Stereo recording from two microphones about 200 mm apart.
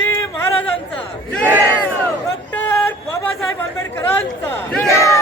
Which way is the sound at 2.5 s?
10° left (ahead or behind).